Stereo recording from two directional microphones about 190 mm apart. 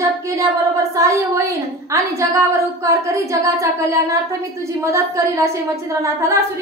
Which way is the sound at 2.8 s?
15° right (ahead or behind).